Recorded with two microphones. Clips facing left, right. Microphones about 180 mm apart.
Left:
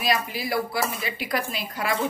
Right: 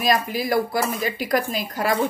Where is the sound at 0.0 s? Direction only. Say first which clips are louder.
Right 4 dB; 45° right (ahead or behind).